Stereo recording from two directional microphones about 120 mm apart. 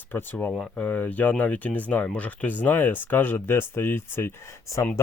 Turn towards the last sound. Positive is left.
turn(degrees=20)  # may be behind; listen again after turning